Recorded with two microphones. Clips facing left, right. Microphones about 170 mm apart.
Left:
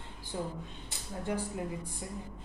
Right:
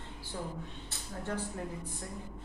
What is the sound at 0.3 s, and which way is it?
A woman's voice, 15° left (ahead or behind).